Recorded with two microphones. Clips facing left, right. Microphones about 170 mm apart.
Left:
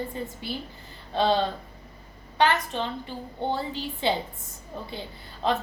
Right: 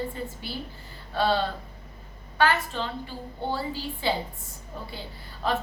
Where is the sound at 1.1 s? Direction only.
20° left (ahead or behind).